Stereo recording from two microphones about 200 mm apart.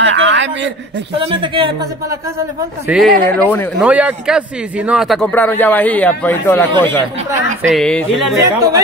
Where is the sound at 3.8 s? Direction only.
5° right (ahead or behind).